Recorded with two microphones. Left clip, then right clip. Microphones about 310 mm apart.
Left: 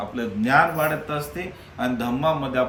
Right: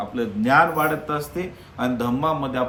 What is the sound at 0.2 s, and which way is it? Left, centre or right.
A man's voice, centre.